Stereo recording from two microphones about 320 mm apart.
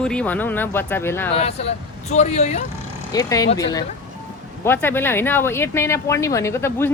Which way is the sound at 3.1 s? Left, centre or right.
Centre.